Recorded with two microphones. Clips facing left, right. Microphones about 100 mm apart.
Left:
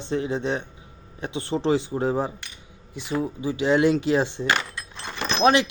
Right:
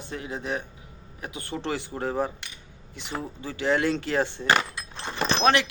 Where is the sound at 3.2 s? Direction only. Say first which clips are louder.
Left 3 dB; 15° left (ahead or behind).